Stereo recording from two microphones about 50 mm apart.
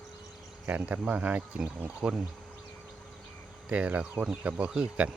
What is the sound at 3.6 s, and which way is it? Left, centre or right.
Speech, right.